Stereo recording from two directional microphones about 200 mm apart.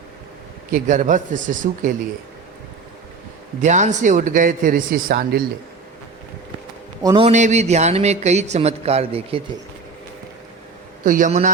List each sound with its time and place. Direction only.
0.7 s a man's voice: 40° right (ahead or behind)
3.6 s a man's voice: 35° right (ahead or behind)
7.0 s speech: 20° right (ahead or behind)
7.3 s a man's voice: 35° right (ahead or behind)
11.0 s a man's voice: 40° right (ahead or behind)